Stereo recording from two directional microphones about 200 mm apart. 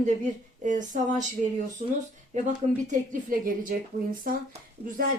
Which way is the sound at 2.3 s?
40° right (ahead or behind).